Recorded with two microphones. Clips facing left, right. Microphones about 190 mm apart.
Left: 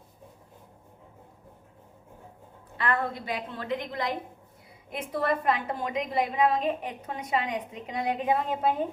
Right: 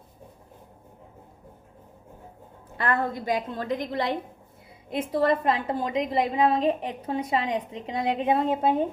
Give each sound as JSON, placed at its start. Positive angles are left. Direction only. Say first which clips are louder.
{"t": 2.7, "sound": "a woman's voice", "louder": "right 2 dB", "side_deg": -40}